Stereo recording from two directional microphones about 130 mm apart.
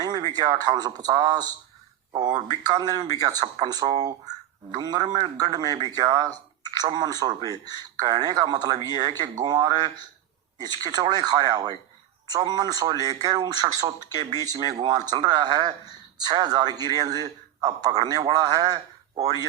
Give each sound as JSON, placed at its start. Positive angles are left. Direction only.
{"t": 0.0, "sound": "speech", "side_deg": -30}
{"t": 2.6, "sound": "speech", "side_deg": -35}